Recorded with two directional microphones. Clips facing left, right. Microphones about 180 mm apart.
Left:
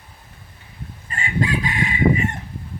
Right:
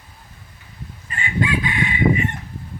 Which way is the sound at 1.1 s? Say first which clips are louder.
Even; 40° left (ahead or behind).